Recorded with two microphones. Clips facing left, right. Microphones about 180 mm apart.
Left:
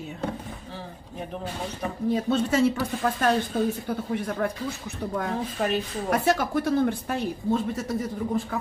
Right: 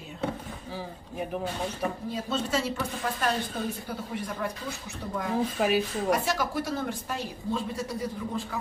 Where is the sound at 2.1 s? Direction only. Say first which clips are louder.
Left 10 dB; 60° left (ahead or behind).